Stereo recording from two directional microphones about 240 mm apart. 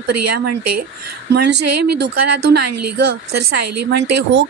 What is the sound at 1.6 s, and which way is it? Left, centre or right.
Speech, right.